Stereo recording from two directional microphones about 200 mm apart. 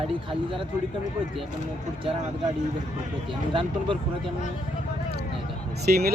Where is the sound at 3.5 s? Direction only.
25° right (ahead or behind).